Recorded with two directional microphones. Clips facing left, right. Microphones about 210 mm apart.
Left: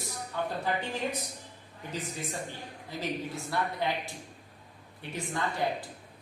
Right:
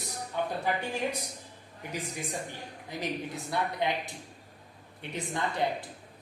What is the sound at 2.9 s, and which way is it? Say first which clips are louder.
A woman's voice: even; 20° right (ahead or behind).